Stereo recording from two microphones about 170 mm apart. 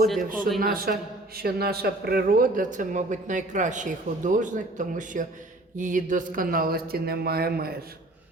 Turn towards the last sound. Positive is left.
turn(degrees=-65)  # may be behind; listen again after turning